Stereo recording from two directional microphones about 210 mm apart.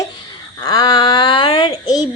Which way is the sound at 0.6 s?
15° left (ahead or behind).